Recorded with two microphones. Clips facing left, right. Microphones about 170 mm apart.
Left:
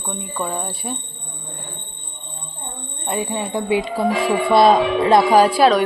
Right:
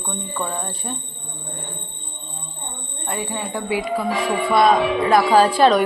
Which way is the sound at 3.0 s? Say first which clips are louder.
Left 3 dB; 20° left (ahead or behind).